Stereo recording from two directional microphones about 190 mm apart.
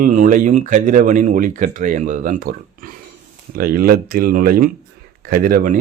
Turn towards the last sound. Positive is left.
turn(degrees=-45)  # may be behind; listen again after turning